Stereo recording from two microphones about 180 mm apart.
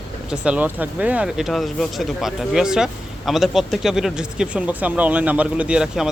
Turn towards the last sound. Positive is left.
turn(degrees=-5)  # may be behind; listen again after turning